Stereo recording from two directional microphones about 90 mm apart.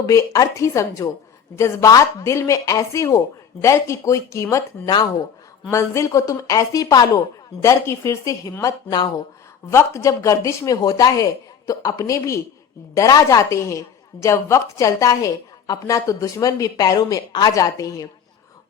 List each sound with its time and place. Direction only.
0.0 s a woman's voice: 40° left (ahead or behind)
5.7 s a woman's voice: 35° left (ahead or behind)
9.6 s a woman's voice: 35° left (ahead or behind)